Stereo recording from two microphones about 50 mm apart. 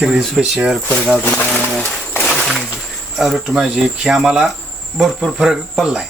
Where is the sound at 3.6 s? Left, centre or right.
Centre.